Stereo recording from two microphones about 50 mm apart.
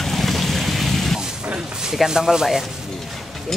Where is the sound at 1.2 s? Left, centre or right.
Centre.